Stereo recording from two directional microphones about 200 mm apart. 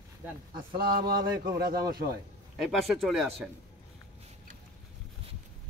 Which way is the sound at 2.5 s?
Centre (ahead or behind).